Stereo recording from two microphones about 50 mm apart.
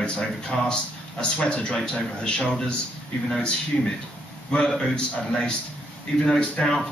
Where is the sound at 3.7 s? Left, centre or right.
Centre.